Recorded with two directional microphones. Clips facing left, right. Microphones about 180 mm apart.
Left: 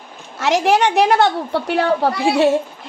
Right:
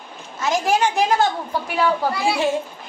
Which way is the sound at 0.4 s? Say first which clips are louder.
Left 4 dB; 70° left (ahead or behind).